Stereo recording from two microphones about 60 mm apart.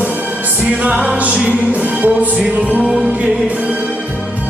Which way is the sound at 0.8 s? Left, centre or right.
Right.